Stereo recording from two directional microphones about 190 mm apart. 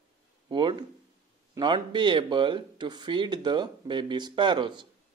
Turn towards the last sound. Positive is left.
turn(degrees=-25)  # may be behind; listen again after turning